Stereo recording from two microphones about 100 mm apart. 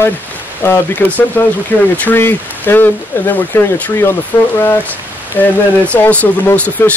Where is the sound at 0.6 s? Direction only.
20° left (ahead or behind).